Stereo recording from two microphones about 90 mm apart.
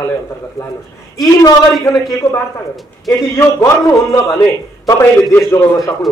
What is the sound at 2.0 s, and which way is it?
Speech, 40° left (ahead or behind).